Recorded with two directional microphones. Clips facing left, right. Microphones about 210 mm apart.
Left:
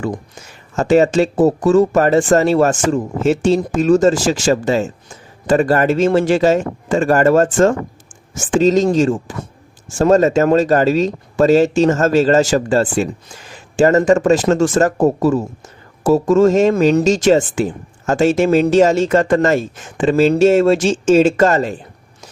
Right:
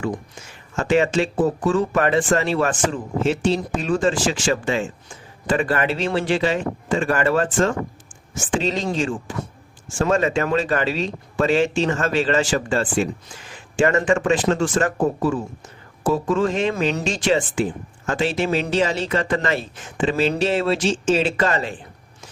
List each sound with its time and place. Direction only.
0.8 s speech: 40° left (ahead or behind)